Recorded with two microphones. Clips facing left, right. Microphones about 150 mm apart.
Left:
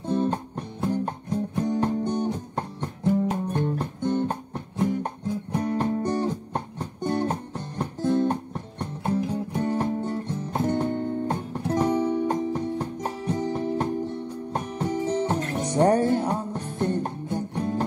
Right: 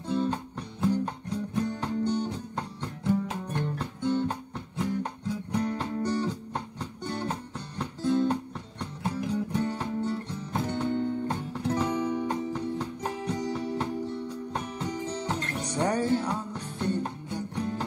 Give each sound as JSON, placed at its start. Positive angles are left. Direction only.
{"t": 0.0, "sound": "music", "side_deg": 50}
{"t": 12.0, "sound": "music", "side_deg": 40}